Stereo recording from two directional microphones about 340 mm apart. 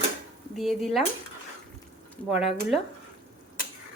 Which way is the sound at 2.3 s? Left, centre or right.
Centre.